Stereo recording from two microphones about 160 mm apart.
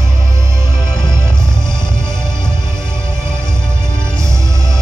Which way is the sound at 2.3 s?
20° right (ahead or behind).